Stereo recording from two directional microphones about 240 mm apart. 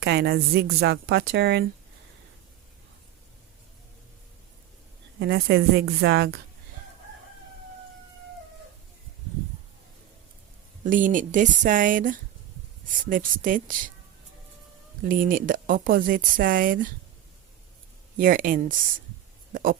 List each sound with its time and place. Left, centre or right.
0.0 s a woman's voice: right
5.2 s a woman's voice: right
10.8 s speech: right
15.0 s speech: right
18.2 s speech: right